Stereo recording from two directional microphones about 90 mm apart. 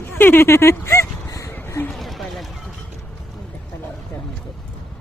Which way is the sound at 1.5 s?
25° left (ahead or behind).